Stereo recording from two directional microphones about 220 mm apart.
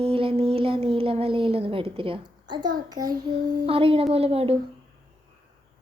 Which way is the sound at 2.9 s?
15° right (ahead or behind).